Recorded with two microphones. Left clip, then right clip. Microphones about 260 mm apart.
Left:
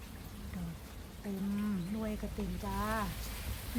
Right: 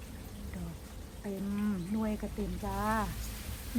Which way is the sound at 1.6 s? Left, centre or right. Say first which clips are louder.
Right 3 dB; centre.